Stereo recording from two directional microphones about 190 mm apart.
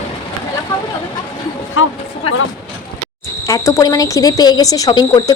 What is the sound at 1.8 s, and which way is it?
Speech, 90° left.